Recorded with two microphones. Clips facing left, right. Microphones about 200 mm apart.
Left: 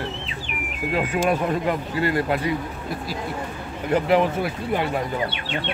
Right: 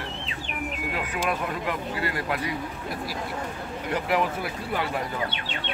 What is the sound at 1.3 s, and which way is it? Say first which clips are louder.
Speech: left 7 dB; 30° left (ahead or behind).